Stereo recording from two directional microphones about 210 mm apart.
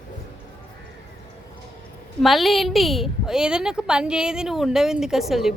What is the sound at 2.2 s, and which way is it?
A woman's voice, centre (ahead or behind).